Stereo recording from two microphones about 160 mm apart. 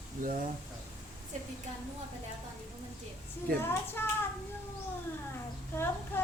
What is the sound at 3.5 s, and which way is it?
Speech, 15° left (ahead or behind).